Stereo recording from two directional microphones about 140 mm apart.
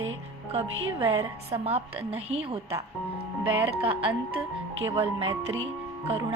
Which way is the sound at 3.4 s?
40° right (ahead or behind).